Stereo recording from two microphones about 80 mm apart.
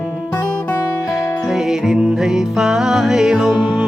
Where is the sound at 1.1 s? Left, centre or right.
Centre.